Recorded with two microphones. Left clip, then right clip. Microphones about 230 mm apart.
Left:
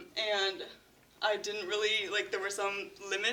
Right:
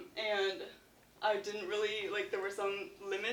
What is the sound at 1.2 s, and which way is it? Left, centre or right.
Speech, left.